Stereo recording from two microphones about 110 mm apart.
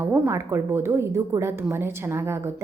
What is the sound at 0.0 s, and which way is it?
A woman's voice, 25° right (ahead or behind).